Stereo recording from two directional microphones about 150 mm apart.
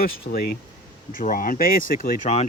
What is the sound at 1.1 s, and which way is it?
Speech, 75° left (ahead or behind).